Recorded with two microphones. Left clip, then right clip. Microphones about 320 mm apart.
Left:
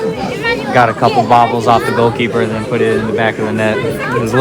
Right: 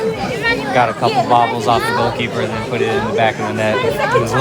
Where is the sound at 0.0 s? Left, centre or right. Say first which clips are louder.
Left 1 dB; centre.